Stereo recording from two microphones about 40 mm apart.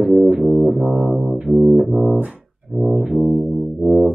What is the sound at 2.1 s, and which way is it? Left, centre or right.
Music, right.